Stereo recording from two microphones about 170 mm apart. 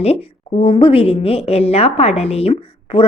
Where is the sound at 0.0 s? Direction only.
35° left (ahead or behind).